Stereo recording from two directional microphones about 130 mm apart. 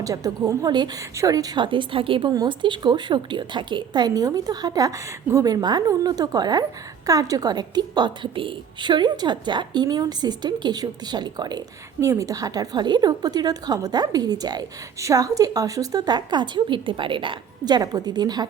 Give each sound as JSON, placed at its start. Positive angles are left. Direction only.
{"t": 0.0, "sound": "a woman's voice", "side_deg": -25}